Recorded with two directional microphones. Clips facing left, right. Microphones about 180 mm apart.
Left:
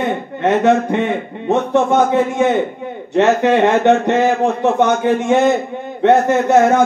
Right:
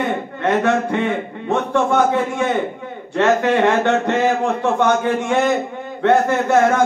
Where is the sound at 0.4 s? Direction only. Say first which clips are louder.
Left 4 dB; 20° left (ahead or behind).